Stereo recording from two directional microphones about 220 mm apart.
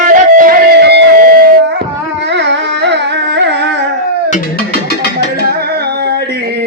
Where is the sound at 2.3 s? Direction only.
55° right (ahead or behind).